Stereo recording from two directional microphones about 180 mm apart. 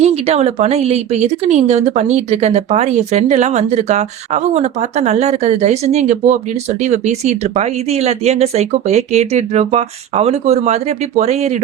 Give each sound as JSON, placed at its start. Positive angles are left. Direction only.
{"t": 0.0, "sound": "speech", "side_deg": -35}